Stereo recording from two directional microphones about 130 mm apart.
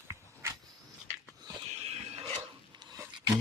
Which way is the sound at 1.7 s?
55° right (ahead or behind).